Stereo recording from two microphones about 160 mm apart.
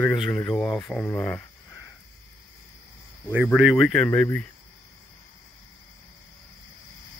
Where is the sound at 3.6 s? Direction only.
Centre (ahead or behind).